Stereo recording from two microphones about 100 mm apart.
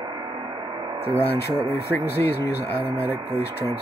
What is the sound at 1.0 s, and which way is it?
Speech, 20° left (ahead or behind).